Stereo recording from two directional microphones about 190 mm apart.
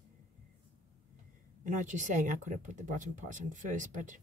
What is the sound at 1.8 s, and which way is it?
Speech, 40° right (ahead or behind).